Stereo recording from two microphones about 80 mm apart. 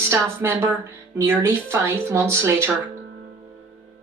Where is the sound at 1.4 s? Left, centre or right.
Right.